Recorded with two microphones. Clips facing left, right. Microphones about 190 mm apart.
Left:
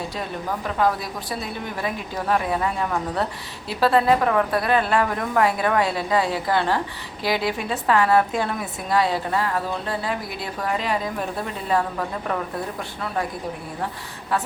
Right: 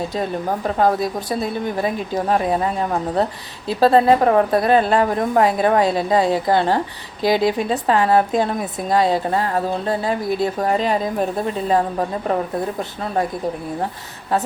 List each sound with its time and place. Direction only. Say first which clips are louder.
0.2 s a woman's voice: right 7 dB; 40° right (ahead or behind)
1.8 s speech: right 4 dB; 30° right (ahead or behind)
8.3 s a woman's voice: right 6 dB; 25° right (ahead or behind)
9.0 s speech: right 4 dB; 40° right (ahead or behind)